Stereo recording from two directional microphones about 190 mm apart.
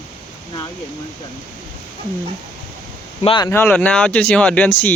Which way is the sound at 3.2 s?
25° left (ahead or behind).